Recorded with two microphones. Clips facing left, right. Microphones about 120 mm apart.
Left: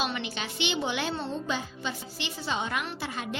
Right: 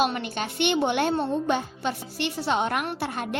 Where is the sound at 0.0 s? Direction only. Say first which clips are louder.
Right 6 dB; 50° right (ahead or behind).